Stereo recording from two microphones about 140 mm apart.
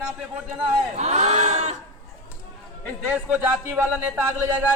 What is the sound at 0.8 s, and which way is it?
Speech, 50° right (ahead or behind).